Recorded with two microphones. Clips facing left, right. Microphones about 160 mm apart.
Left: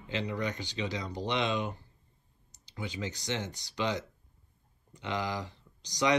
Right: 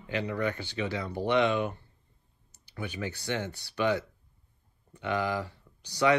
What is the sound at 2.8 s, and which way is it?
Speech, 15° left (ahead or behind).